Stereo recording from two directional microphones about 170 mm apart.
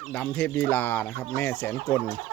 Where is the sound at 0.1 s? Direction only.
5° left (ahead or behind).